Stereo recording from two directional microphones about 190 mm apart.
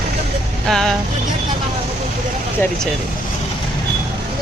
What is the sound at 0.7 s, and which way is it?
Speech, centre (ahead or behind).